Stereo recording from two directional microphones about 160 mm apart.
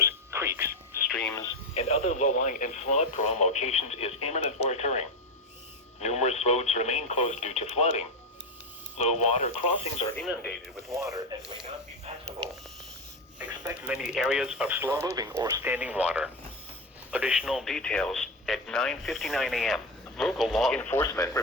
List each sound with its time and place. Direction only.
0.0 s a sound: 15° right (ahead or behind)
1.3 s radio: 20° left (ahead or behind)
1.7 s speech: 40° left (ahead or behind)
10.2 s speech: 5° left (ahead or behind)
10.9 s speech: 20° right (ahead or behind)
13.4 s speech: 10° right (ahead or behind)
15.7 s speech: 10° right (ahead or behind); by 21.3 s 20° left (ahead or behind)